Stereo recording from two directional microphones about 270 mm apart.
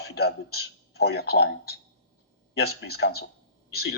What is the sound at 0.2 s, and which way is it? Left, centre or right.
Speech, left.